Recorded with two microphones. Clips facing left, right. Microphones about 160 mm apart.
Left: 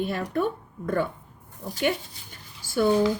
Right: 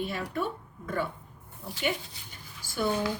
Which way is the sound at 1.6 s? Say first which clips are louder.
Left 6 dB; 40° left (ahead or behind).